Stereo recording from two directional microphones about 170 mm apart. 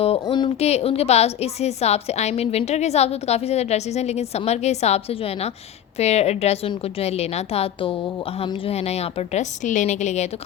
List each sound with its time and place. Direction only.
0.0 s a woman's voice: 30° left (ahead or behind)